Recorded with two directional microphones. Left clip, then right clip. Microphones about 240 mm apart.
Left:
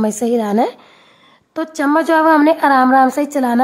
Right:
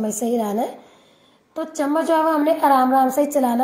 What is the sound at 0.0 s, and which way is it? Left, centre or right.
A woman's voice, left.